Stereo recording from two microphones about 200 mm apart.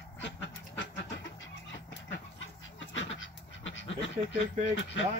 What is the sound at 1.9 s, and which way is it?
Dog, 65° left (ahead or behind).